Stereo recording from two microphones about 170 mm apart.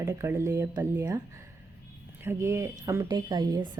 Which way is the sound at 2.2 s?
15° right (ahead or behind).